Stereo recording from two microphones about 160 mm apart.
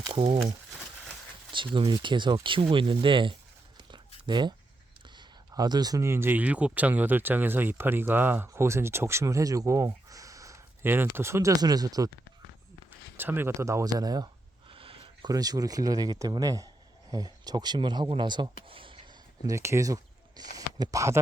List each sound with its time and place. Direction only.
0.1 s speech: 25° right (ahead or behind)
1.5 s speech: 30° right (ahead or behind)
13.1 s speech: 15° right (ahead or behind)
14.7 s speech: 35° right (ahead or behind)
19.5 s speech: 15° right (ahead or behind)
20.6 s a sound: 25° right (ahead or behind)